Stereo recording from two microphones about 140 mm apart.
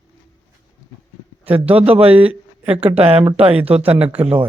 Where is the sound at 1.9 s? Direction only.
45° right (ahead or behind).